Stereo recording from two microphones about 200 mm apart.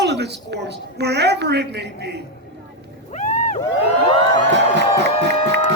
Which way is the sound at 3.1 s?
40° left (ahead or behind).